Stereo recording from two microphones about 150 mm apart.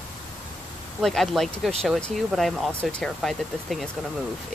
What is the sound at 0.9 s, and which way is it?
Speech, centre (ahead or behind).